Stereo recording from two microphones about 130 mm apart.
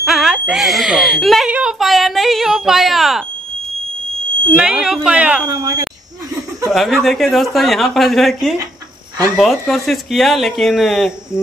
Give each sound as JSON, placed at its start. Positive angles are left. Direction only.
{"t": 0.0, "sound": "speech", "side_deg": -5}
{"t": 4.5, "sound": "speech", "side_deg": -10}
{"t": 5.5, "sound": "speech", "side_deg": -30}
{"t": 6.7, "sound": "speech", "side_deg": 0}